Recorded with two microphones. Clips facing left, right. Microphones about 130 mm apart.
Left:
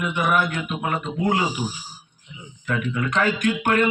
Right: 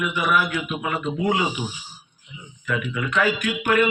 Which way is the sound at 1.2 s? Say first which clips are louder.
Left 1 dB; 40° left (ahead or behind).